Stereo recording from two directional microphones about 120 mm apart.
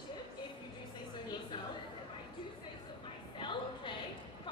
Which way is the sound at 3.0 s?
40° left (ahead or behind).